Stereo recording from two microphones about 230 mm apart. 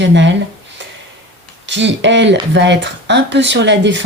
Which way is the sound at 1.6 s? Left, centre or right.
Right.